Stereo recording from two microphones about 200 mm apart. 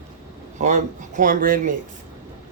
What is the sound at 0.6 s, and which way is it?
Speech, 40° right (ahead or behind).